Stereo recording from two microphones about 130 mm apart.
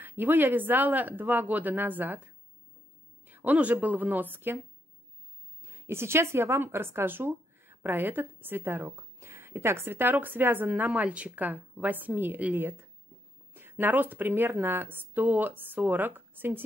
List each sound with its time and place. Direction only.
0.0 s a woman's voice: 15° right (ahead or behind)
3.3 s a woman's voice: 15° right (ahead or behind)
5.6 s a sound: 20° right (ahead or behind)
6.3 s a woman's voice: 20° right (ahead or behind)